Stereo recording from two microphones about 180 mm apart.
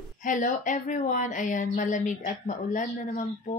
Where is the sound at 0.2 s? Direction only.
45° left (ahead or behind).